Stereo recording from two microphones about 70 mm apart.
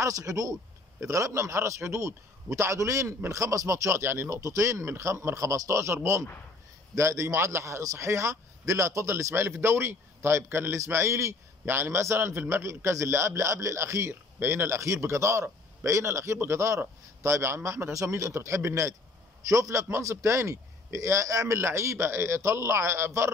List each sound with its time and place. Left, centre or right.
0.0 s a man's voice: right
21.5 s a man's voice: right